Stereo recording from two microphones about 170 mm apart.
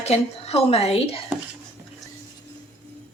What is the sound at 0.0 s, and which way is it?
A woman's voice, 40° left (ahead or behind).